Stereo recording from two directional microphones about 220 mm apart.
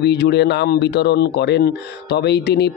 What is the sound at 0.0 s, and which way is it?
Speech, 50° left (ahead or behind).